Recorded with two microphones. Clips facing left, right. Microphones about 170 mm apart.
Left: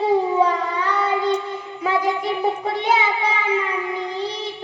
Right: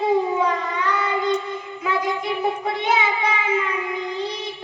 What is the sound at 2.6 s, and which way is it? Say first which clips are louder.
A child's voice: left 1 dB; 35° left (ahead or behind).